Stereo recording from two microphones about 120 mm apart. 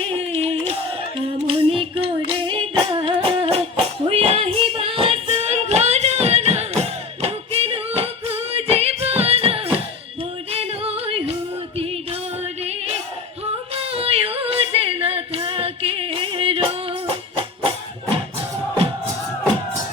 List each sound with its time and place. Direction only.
0.1 s a sound: 50° right (ahead or behind)
1.2 s female singing: 50° right (ahead or behind)
7.2 s music: 55° right (ahead or behind)
10.5 s yodeling: 55° right (ahead or behind)
13.7 s yodeling: 55° right (ahead or behind)
17.3 s music: 45° right (ahead or behind)